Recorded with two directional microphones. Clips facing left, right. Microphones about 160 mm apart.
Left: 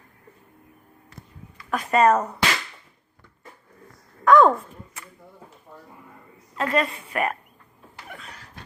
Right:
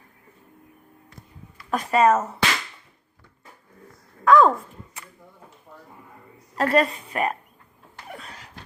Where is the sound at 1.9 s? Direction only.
5° right (ahead or behind).